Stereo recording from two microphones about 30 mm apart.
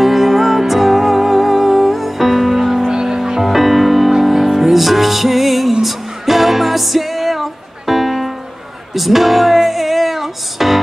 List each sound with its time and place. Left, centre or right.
0.0 s music: centre
2.9 s music: centre
3.4 s music: centre